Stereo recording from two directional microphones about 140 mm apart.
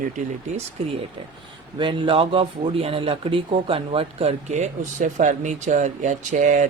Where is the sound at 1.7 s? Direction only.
35° right (ahead or behind).